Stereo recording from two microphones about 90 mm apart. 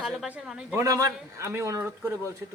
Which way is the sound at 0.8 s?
40° right (ahead or behind).